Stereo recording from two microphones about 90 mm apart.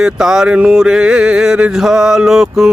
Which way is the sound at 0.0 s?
5° right (ahead or behind).